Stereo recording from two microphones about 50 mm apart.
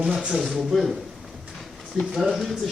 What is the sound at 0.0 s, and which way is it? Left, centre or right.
Speech, centre.